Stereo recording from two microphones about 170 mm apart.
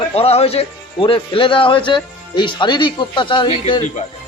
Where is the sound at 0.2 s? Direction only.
35° left (ahead or behind).